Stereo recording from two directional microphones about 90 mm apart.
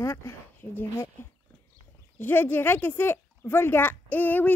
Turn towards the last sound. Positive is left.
turn(degrees=20)  # may be behind; listen again after turning